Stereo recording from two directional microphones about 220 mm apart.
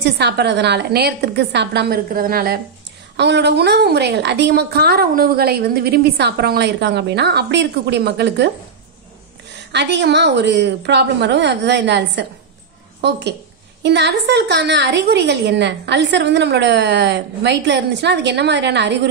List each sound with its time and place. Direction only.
0.0 s a woman's voice: 50° right (ahead or behind)
9.7 s a woman's voice: 50° right (ahead or behind)